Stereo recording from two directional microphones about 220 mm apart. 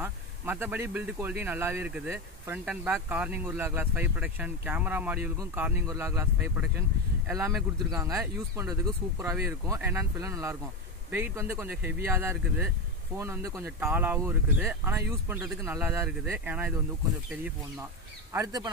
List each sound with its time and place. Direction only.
0.0 s speech: 10° right (ahead or behind)